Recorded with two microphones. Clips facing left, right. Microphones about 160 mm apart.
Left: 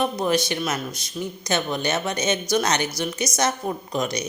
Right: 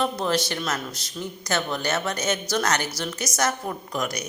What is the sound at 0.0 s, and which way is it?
A man's voice, 15° left (ahead or behind).